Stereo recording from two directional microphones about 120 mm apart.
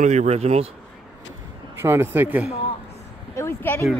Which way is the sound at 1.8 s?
20° right (ahead or behind).